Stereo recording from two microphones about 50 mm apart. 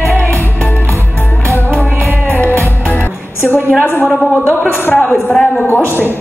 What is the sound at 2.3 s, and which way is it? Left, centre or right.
Music, left.